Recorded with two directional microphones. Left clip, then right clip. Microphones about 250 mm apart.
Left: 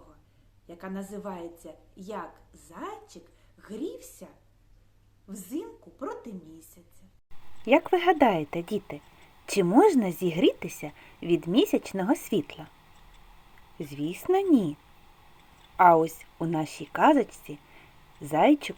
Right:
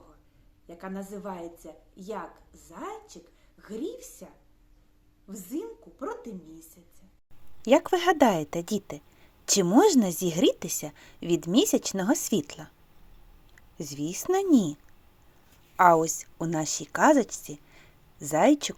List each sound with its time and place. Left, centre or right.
0.7 s a woman's voice: centre
5.3 s a woman's voice: centre
7.8 s a woman's voice: centre
12.2 s a woman's voice: right
13.7 s speech: right
14.2 s a woman's voice: right
15.8 s a woman's voice: right
17.2 s a woman's voice: right
17.7 s a sound: centre